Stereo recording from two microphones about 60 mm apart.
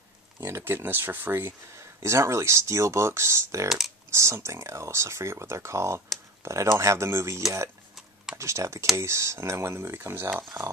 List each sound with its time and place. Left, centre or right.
0.5 s speech: right
1.8 s speech: right
3.6 s speech: centre
4.1 s speech: right